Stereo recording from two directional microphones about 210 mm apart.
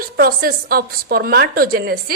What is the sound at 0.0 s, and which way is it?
A woman's voice, 45° right (ahead or behind).